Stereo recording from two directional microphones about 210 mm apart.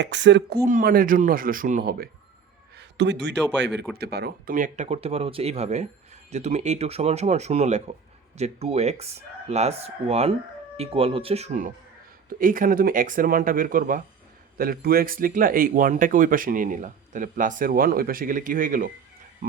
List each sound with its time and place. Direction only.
0.0 s speech: 55° right (ahead or behind)
2.7 s speech: 55° right (ahead or behind); by 18.9 s 40° right (ahead or behind)